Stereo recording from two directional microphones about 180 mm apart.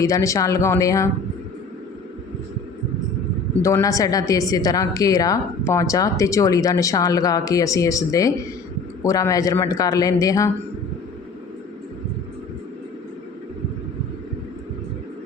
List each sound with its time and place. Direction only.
0.0 s speech: 20° left (ahead or behind)
3.6 s a woman's voice: 15° left (ahead or behind)